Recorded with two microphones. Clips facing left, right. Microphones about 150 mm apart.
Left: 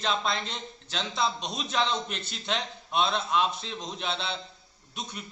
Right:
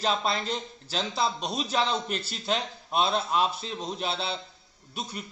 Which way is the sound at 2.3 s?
35° right (ahead or behind).